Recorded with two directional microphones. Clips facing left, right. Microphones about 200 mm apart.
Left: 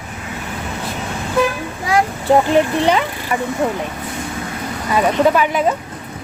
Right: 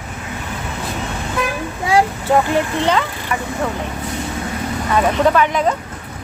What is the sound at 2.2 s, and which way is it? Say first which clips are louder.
Speech: left 3 dB; 15° left (ahead or behind).